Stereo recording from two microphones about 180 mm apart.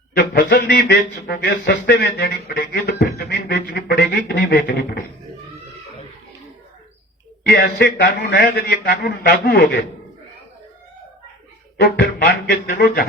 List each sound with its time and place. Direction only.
0.2 s speech: 60° left (ahead or behind)
7.4 s speech: 65° left (ahead or behind)
11.8 s speech: 65° left (ahead or behind)